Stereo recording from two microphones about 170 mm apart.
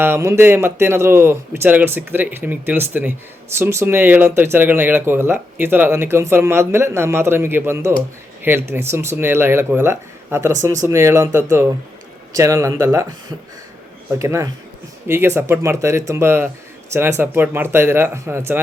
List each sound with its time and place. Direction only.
0.0 s speech: 15° right (ahead or behind)
14.2 s speech: 15° right (ahead or behind)